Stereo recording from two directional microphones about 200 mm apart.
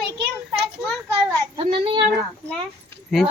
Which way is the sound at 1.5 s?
25° right (ahead or behind).